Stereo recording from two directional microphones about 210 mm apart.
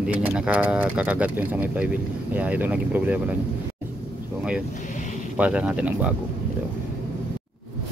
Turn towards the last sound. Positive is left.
turn(degrees=-5)  # may be behind; listen again after turning